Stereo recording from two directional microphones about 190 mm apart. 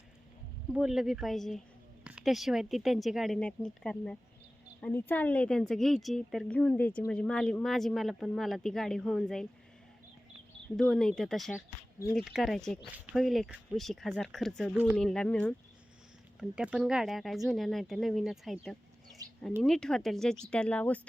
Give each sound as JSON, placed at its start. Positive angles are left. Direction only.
{"t": 0.7, "sound": "a woman's voice", "side_deg": 0}
{"t": 10.8, "sound": "a woman's voice", "side_deg": 5}
{"t": 19.2, "sound": "a sound", "side_deg": -20}
{"t": 19.6, "sound": "a woman's voice", "side_deg": 5}